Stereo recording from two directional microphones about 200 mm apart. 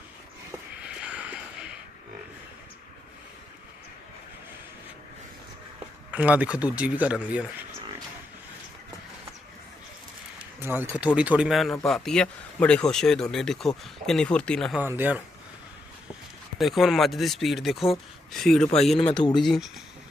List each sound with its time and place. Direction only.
0.8 s a sound: 5° right (ahead or behind)
6.1 s speech: 5° right (ahead or behind)
10.6 s a man's voice: 10° right (ahead or behind)
14.8 s speech: 10° right (ahead or behind)
16.6 s a man's voice: centre (ahead or behind)
19.1 s speech: 20° left (ahead or behind)
19.4 s a man's voice: centre (ahead or behind)